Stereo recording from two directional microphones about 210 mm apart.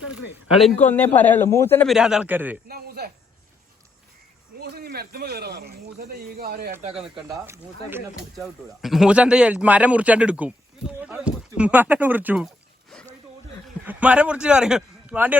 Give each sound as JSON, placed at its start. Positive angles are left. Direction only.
{"t": 0.4, "sound": "a man's voice", "side_deg": 0}
{"t": 1.9, "sound": "a man's voice", "side_deg": -5}
{"t": 2.6, "sound": "speech", "side_deg": -45}
{"t": 4.6, "sound": "speech", "side_deg": -50}
{"t": 7.4, "sound": "speech", "side_deg": -10}
{"t": 13.8, "sound": "a man's voice", "side_deg": -5}